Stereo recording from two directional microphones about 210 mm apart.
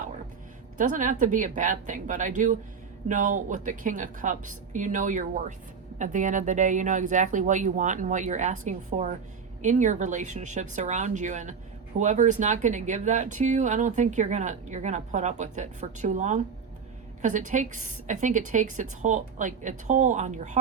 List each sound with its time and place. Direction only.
0.8 s speech: 35° right (ahead or behind)